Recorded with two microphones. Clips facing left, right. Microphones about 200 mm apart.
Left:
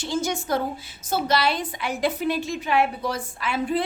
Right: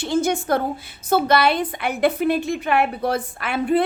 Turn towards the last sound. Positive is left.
turn(degrees=-60)  # may be behind; listen again after turning